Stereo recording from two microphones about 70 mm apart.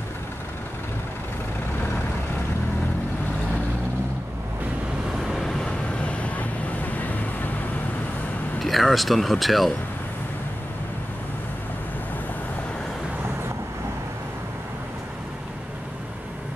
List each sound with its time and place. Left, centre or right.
5.2 s vehicle: centre
8.5 s speech: centre